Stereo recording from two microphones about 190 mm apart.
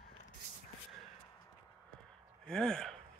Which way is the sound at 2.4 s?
5° left (ahead or behind).